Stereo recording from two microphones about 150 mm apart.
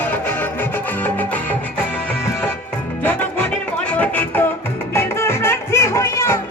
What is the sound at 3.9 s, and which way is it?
Music, 10° left (ahead or behind).